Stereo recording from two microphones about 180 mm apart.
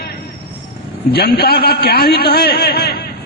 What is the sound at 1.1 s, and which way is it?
A man's voice, 60° left (ahead or behind).